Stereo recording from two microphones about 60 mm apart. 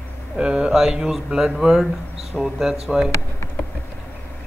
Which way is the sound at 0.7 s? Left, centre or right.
Centre.